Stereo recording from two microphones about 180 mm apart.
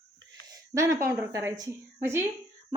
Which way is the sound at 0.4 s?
20° right (ahead or behind).